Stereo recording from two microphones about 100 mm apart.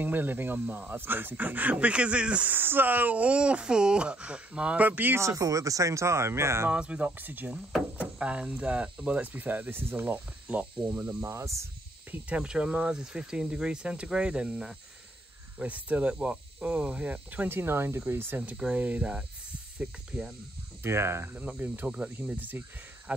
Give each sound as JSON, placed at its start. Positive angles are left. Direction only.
{"t": 0.0, "sound": "speech", "side_deg": -20}
{"t": 5.2, "sound": "speech", "side_deg": -35}
{"t": 6.7, "sound": "speech", "side_deg": -10}
{"t": 12.1, "sound": "speech", "side_deg": -15}
{"t": 20.8, "sound": "speech", "side_deg": -25}
{"t": 21.5, "sound": "speech", "side_deg": -15}